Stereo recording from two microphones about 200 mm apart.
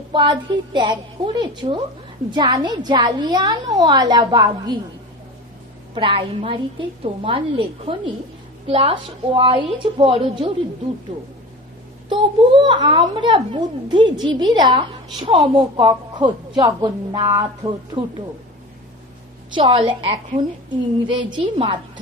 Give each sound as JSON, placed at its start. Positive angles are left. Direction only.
{"t": 0.1, "sound": "a woman's voice", "side_deg": -25}
{"t": 5.9, "sound": "a woman's voice", "side_deg": -25}
{"t": 19.5, "sound": "a woman's voice", "side_deg": -25}
{"t": 21.3, "sound": "a woman's voice", "side_deg": -25}